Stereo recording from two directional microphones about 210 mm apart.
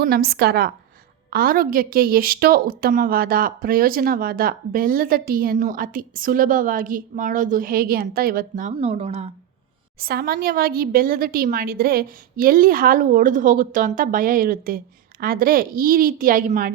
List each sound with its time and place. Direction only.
0.0 s a woman's voice: 50° right (ahead or behind); by 9.3 s 30° right (ahead or behind)
10.0 s a woman's voice: 45° right (ahead or behind)